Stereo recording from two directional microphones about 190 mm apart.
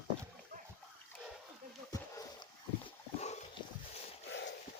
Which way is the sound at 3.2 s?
35° left (ahead or behind).